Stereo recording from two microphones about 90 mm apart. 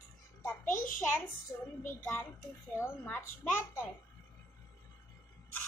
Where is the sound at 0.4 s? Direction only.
30° left (ahead or behind).